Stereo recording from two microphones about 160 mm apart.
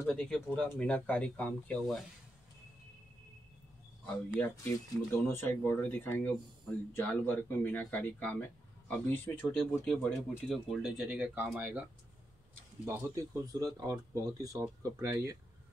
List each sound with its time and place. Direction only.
0.0 s speech: 5° left (ahead or behind)
4.0 s speech: 10° left (ahead or behind); by 11.8 s 10° right (ahead or behind)
12.8 s speech: 20° right (ahead or behind)